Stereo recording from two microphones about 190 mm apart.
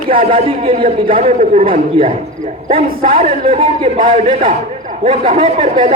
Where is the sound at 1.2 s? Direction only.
40° right (ahead or behind).